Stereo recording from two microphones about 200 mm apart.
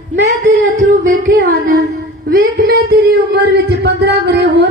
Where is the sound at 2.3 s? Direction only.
45° right (ahead or behind).